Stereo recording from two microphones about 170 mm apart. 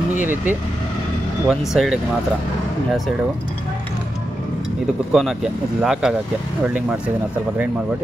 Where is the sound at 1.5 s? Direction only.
Centre (ahead or behind).